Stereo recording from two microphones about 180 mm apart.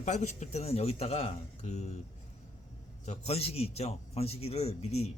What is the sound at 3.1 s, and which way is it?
A man's voice, 35° left (ahead or behind).